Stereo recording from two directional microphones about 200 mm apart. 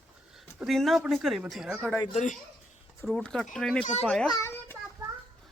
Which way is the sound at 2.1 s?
35° left (ahead or behind).